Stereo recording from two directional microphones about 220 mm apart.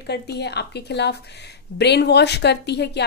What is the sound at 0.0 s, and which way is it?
Speech, 50° left (ahead or behind).